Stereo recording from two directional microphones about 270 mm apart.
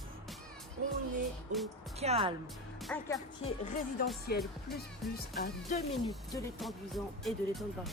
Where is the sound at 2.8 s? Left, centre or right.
Centre.